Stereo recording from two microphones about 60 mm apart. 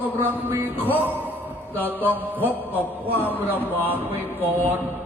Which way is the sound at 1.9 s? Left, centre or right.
Right.